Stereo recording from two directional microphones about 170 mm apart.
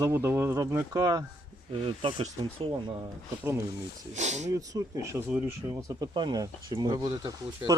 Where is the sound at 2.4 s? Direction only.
30° right (ahead or behind).